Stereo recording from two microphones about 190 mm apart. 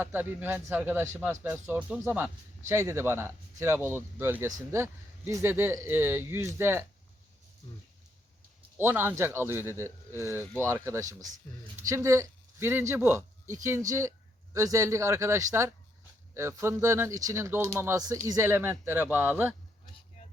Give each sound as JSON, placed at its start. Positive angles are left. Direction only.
{"t": 0.0, "sound": "speech", "side_deg": -10}
{"t": 8.8, "sound": "speech", "side_deg": -10}